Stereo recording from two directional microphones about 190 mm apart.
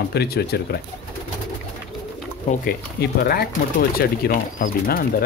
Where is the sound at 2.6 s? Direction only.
50° left (ahead or behind).